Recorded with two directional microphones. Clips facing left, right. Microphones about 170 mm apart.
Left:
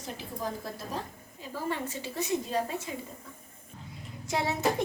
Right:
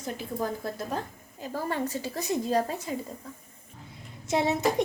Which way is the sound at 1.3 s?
40° right (ahead or behind).